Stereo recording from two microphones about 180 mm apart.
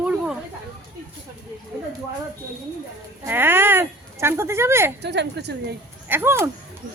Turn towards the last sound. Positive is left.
turn(degrees=-10)  # may be behind; listen again after turning